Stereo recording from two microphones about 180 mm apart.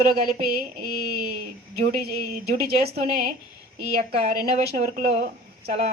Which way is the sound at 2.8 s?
55° right (ahead or behind).